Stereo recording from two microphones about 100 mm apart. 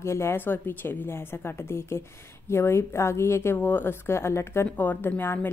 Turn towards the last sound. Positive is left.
turn(degrees=20)  # may be behind; listen again after turning